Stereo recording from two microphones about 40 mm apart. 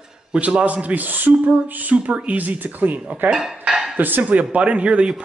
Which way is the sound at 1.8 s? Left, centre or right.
Right.